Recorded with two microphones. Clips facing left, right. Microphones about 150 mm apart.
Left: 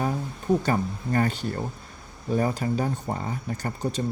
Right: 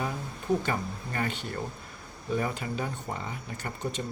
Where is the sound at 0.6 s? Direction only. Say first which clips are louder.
Left 6 dB; 40° left (ahead or behind).